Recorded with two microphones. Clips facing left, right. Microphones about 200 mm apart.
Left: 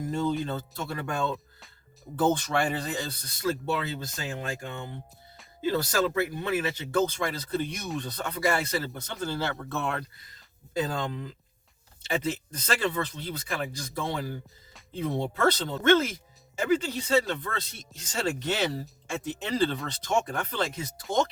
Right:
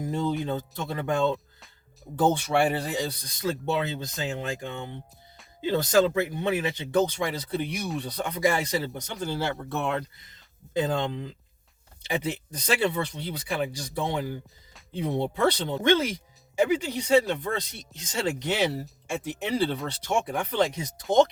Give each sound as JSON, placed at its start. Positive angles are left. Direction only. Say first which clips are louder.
{"t": 0.1, "sound": "speech", "louder": "right 1 dB", "side_deg": -15}
{"t": 2.3, "sound": "speech", "louder": "right 3 dB", "side_deg": -10}